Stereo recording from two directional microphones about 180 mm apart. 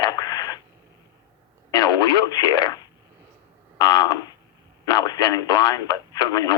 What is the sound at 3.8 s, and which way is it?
Speech, 25° left (ahead or behind).